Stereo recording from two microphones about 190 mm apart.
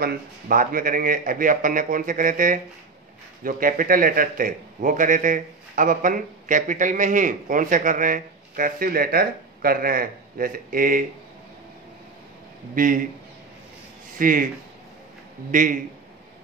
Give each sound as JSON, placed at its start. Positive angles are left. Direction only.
{"t": 0.0, "sound": "a man's voice", "side_deg": -50}
{"t": 12.7, "sound": "a man's voice", "side_deg": -45}
{"t": 14.1, "sound": "a man's voice", "side_deg": -45}
{"t": 15.5, "sound": "a man's voice", "side_deg": -45}